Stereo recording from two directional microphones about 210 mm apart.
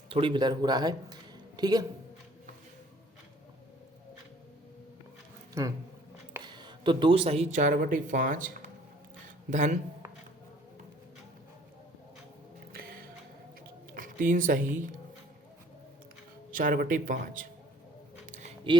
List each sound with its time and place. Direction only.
0.1 s speech: 25° right (ahead or behind)
5.6 s speech: 15° right (ahead or behind); by 9.7 s 35° right (ahead or behind)
13.9 s speech: 40° right (ahead or behind)
16.5 s speech: 40° right (ahead or behind)
18.3 s a sound: 35° right (ahead or behind)